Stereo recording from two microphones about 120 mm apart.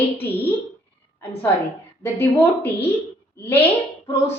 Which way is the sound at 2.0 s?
15° left (ahead or behind).